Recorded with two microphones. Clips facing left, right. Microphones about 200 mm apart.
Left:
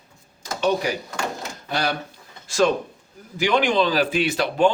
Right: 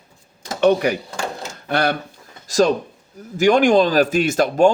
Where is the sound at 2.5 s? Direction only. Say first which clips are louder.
Right 3 dB; 40° right (ahead or behind).